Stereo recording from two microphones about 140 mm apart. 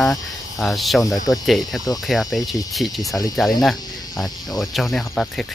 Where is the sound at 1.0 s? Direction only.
25° left (ahead or behind).